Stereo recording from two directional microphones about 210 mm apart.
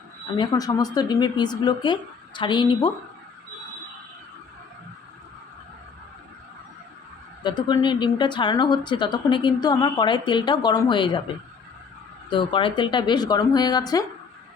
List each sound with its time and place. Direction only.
0.3 s a woman's voice: 20° left (ahead or behind)
7.4 s a woman's voice: 20° left (ahead or behind)
12.3 s a woman's voice: 25° left (ahead or behind)